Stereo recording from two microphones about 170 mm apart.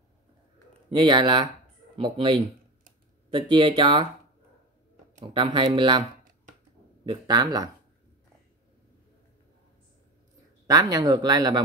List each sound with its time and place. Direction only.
0.9 s speech: 30° right (ahead or behind)
5.2 s speech: 30° right (ahead or behind)
7.1 s speech: 25° right (ahead or behind)
10.7 s speech: 25° right (ahead or behind)